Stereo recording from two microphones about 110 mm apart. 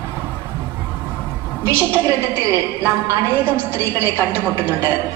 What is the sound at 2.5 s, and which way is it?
A woman's voice, 25° right (ahead or behind).